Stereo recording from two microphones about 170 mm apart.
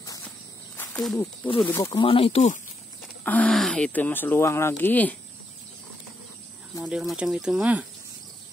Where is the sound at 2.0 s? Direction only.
35° left (ahead or behind).